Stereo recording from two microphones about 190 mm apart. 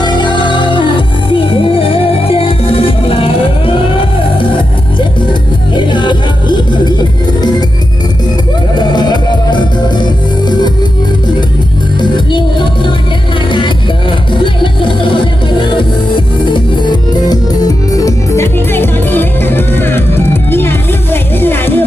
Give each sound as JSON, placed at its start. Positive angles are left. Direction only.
{"t": 0.0, "sound": "music", "side_deg": 25}
{"t": 5.7, "sound": "music", "side_deg": 25}
{"t": 9.0, "sound": "music", "side_deg": 25}
{"t": 11.9, "sound": "music", "side_deg": 25}